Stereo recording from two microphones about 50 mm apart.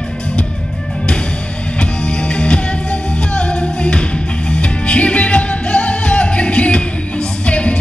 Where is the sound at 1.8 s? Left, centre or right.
Centre.